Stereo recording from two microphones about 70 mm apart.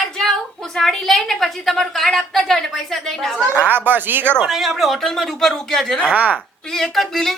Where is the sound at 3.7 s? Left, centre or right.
Right.